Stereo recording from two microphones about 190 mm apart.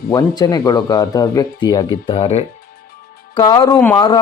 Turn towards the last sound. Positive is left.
turn(degrees=20)  # may be behind; listen again after turning